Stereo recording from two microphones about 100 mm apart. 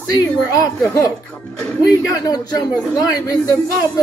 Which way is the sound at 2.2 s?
40° left (ahead or behind).